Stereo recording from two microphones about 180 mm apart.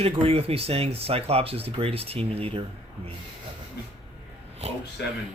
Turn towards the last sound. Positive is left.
turn(degrees=-35)  # may be behind; listen again after turning